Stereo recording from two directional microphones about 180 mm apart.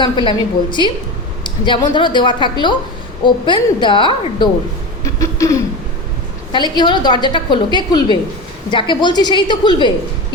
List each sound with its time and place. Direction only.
0.0 s a woman's voice: 25° left (ahead or behind)
5.0 s a sound: 15° left (ahead or behind)
6.5 s a woman's voice: 25° left (ahead or behind)